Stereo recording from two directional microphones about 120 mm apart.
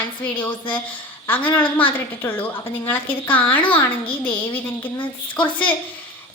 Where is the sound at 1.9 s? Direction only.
15° left (ahead or behind).